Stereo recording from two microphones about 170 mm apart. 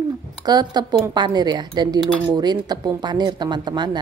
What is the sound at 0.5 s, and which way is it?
A woman's voice, 25° right (ahead or behind).